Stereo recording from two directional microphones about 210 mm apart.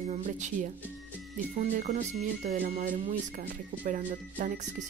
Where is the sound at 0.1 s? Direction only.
35° right (ahead or behind).